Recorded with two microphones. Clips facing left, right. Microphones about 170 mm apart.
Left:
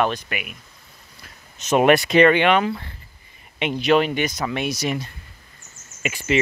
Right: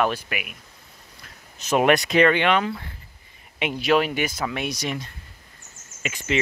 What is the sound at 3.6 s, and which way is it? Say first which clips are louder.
Speech: left 2 dB; 5° right (ahead or behind).